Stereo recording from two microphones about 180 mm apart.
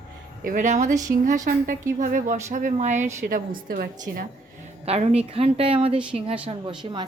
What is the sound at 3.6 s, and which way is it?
Speech, 55° right (ahead or behind).